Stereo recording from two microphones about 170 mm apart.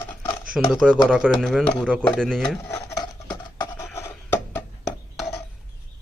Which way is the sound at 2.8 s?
25° left (ahead or behind).